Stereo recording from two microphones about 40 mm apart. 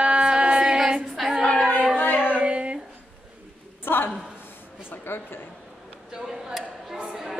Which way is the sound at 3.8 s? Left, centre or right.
Left.